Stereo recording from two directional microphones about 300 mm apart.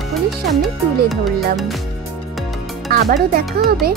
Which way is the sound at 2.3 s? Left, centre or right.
Centre.